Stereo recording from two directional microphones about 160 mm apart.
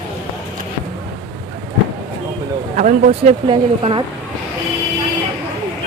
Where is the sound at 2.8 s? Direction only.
50° right (ahead or behind).